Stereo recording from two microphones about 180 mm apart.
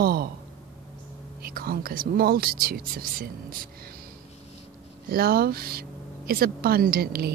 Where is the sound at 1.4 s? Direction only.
55° right (ahead or behind).